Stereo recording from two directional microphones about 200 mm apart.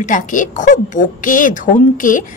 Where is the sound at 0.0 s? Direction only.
40° left (ahead or behind).